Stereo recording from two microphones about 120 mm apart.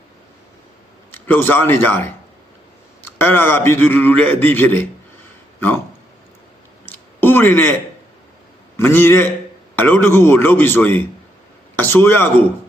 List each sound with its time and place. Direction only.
1.1 s a man's voice: 15° left (ahead or behind)
6.8 s a sound: 15° left (ahead or behind)
8.7 s a man's voice: 20° left (ahead or behind)